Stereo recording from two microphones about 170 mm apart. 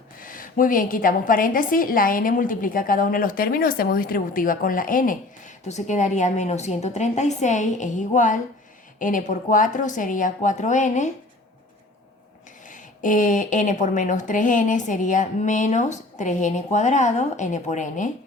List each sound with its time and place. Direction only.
0.2 s a woman's voice: 55° left (ahead or behind)
12.6 s a woman's voice: 50° left (ahead or behind)